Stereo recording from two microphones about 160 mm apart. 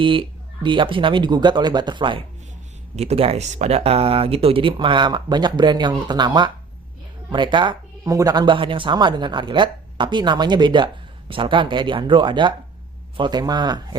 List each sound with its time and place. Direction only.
0.0 s speech: 30° right (ahead or behind)
2.9 s speech: 40° right (ahead or behind)